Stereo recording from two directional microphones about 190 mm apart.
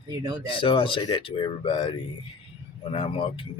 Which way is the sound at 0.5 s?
25° left (ahead or behind).